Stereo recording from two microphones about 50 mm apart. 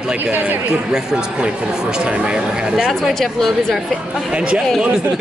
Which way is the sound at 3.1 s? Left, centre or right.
Centre.